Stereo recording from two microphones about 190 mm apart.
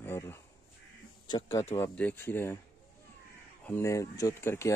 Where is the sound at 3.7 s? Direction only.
15° left (ahead or behind).